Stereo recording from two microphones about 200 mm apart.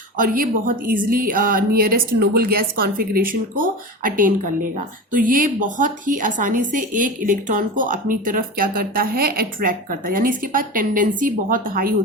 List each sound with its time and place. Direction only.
0.2 s a woman's voice: 45° right (ahead or behind)